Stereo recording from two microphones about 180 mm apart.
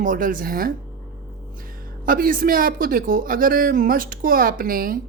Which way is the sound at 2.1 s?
50° right (ahead or behind).